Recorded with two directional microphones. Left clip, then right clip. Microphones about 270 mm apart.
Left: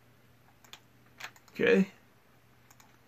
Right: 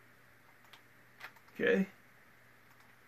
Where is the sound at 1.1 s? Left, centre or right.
Left.